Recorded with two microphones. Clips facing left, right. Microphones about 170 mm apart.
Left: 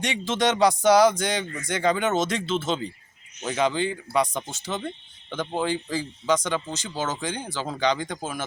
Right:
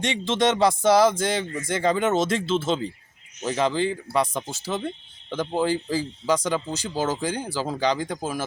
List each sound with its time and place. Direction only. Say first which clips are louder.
0.0 s speech: right 2 dB; centre (ahead or behind)